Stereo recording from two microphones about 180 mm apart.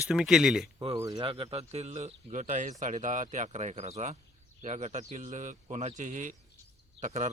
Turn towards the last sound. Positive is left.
turn(degrees=-40)  # may be behind; listen again after turning